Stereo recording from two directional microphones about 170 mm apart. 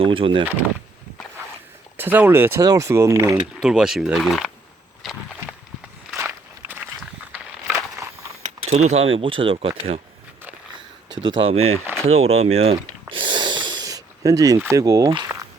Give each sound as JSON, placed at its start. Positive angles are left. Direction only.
{"t": 0.0, "sound": "speech", "side_deg": -30}
{"t": 2.0, "sound": "speech", "side_deg": -10}
{"t": 3.6, "sound": "speech", "side_deg": -5}
{"t": 6.1, "sound": "walk", "side_deg": -15}
{"t": 8.6, "sound": "speech", "side_deg": -35}
{"t": 11.2, "sound": "speech", "side_deg": -30}
{"t": 12.7, "sound": "a sound", "side_deg": -25}